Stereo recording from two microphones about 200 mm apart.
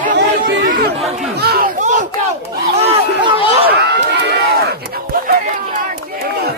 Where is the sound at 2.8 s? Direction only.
30° right (ahead or behind).